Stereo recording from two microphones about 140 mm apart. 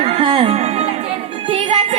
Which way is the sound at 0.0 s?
40° right (ahead or behind).